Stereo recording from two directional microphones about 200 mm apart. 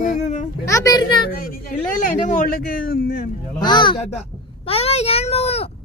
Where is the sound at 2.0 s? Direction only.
40° left (ahead or behind).